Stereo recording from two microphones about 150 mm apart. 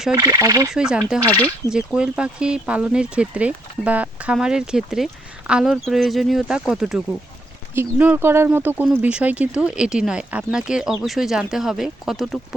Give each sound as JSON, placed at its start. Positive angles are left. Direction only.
{"t": 0.1, "sound": "speech", "side_deg": -25}
{"t": 0.7, "sound": "speech", "side_deg": -5}
{"t": 1.2, "sound": "speech", "side_deg": 10}
{"t": 1.7, "sound": "speech", "side_deg": -5}